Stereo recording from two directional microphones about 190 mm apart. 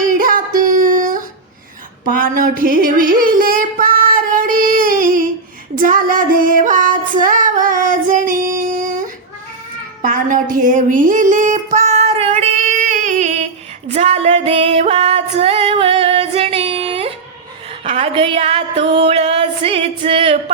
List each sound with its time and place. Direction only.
0.0 s child singing: 45° right (ahead or behind)
2.1 s music: 45° right (ahead or behind)
3.5 s female singing: 45° right (ahead or behind)
10.0 s music: 45° right (ahead or behind)
13.9 s female singing: 35° right (ahead or behind)
17.8 s music: 30° right (ahead or behind)